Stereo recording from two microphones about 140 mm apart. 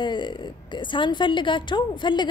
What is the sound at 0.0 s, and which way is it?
A woman's voice, 35° left (ahead or behind).